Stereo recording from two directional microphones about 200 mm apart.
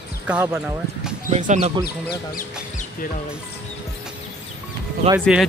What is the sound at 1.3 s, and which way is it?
Speech, 35° right (ahead or behind).